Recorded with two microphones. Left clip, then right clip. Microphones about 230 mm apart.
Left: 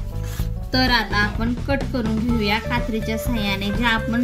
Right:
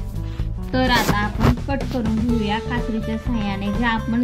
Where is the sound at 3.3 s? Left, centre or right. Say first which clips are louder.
Left 2 dB; centre.